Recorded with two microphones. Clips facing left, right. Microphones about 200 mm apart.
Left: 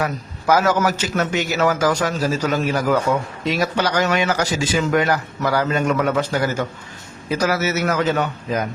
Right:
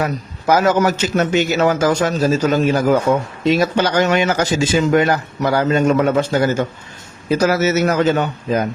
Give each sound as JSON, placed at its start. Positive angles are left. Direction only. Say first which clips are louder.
{"t": 0.0, "sound": "speech", "louder": "right 3 dB", "side_deg": -25}